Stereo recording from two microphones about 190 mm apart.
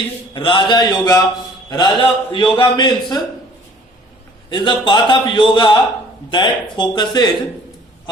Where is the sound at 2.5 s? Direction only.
25° left (ahead or behind).